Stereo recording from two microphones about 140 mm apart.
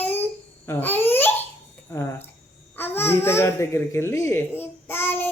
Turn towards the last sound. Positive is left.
turn(degrees=15)  # may be behind; listen again after turning